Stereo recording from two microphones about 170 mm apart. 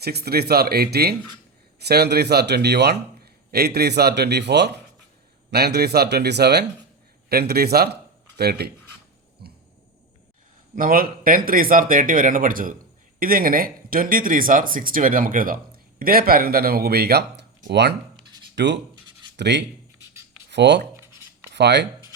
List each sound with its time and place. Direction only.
0.0 s a man's voice: 70° right (ahead or behind)
5.5 s a man's voice: 70° right (ahead or behind)
7.3 s a man's voice: 65° right (ahead or behind)
9.4 s a sound: 70° right (ahead or behind)
10.8 s speech: 55° right (ahead or behind); by 17.9 s 80° right
18.5 s rub: 90° right
19.4 s speech: 90° right
20.9 s writing: 15° right (ahead or behind)
21.5 s speech: 90° right